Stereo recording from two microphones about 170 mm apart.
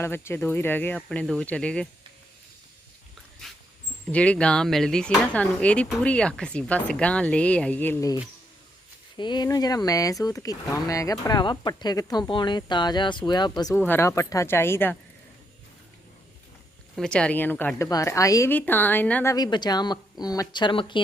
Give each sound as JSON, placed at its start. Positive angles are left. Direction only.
{"t": 0.0, "sound": "speech", "side_deg": 15}
{"t": 4.1, "sound": "speech", "side_deg": 5}
{"t": 9.1, "sound": "speech", "side_deg": 25}
{"t": 13.7, "sound": "speech", "side_deg": 10}
{"t": 16.9, "sound": "speech", "side_deg": 5}
{"t": 19.3, "sound": "speech", "side_deg": 25}